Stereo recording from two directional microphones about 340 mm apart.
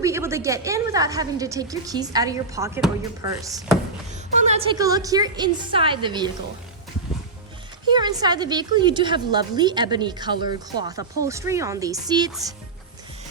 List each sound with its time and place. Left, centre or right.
0.0 s a woman's voice: centre
7.9 s a woman's voice: centre